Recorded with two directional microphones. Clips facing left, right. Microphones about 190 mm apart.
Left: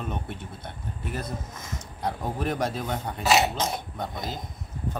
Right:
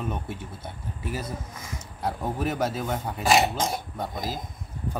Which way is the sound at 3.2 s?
50° right (ahead or behind).